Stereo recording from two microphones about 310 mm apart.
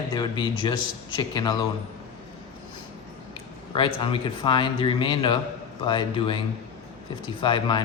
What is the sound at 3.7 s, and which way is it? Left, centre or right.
Speech, centre.